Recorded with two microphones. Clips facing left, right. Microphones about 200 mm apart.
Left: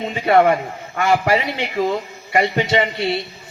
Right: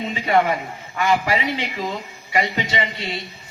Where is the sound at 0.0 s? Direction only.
60° left (ahead or behind).